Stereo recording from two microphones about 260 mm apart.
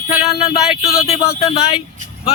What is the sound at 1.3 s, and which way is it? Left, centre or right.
Speech, left.